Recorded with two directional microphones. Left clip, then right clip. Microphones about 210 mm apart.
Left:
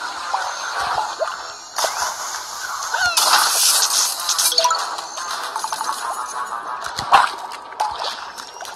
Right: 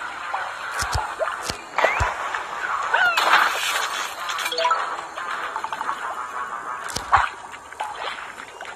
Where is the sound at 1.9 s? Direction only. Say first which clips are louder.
Right 1 dB; 30° left (ahead or behind).